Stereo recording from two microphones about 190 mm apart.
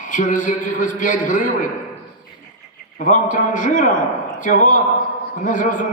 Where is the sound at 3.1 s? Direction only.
45° left (ahead or behind).